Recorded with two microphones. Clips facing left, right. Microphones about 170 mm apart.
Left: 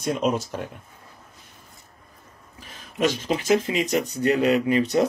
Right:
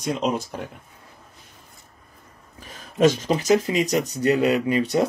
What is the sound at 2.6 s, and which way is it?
Speech, 45° right (ahead or behind).